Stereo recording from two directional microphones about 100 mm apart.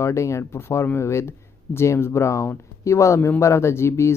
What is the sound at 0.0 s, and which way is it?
Speech, 30° left (ahead or behind).